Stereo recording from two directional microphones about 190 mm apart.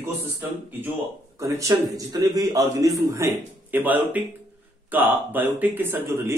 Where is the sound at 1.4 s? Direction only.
15° right (ahead or behind).